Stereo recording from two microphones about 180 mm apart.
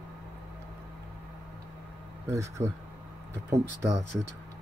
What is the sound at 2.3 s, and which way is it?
Speech, 15° right (ahead or behind).